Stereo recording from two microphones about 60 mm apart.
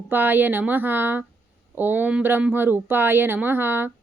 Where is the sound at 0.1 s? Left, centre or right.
Right.